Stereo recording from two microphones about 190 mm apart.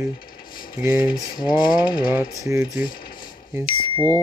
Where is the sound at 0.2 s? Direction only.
50° left (ahead or behind).